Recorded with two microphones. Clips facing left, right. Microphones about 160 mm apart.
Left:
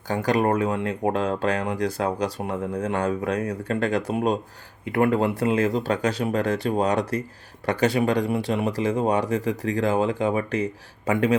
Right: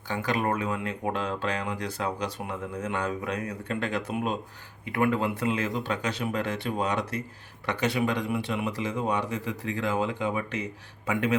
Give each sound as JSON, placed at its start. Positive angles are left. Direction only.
{"t": 0.1, "sound": "speech", "side_deg": 40}